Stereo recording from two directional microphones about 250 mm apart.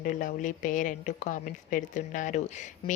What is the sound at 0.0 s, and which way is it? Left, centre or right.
A woman's voice, left.